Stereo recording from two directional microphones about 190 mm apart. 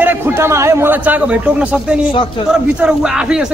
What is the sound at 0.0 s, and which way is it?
A man's voice, 10° right (ahead or behind).